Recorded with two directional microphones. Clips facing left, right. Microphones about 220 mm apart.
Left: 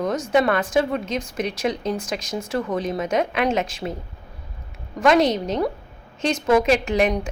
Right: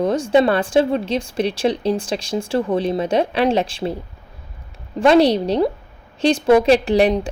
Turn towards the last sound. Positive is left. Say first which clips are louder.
# right 5 dB
turn(degrees=-35)  # may be behind; listen again after turning